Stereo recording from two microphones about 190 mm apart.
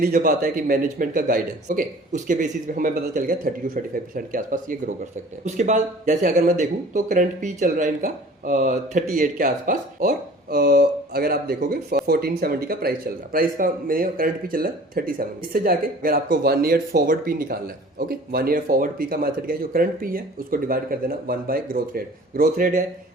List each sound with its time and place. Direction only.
0.0 s speech: 50° right (ahead or behind)